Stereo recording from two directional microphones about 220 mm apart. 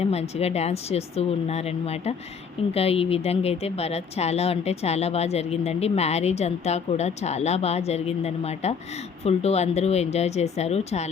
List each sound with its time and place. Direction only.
0.0 s a woman's voice: 30° left (ahead or behind)